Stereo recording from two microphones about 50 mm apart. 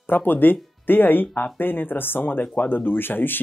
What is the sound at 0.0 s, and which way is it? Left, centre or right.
Speech, left.